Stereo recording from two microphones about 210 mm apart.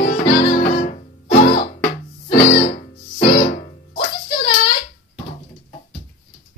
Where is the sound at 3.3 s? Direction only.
40° left (ahead or behind).